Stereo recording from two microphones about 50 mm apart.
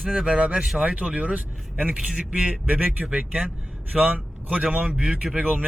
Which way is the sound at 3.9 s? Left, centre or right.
Right.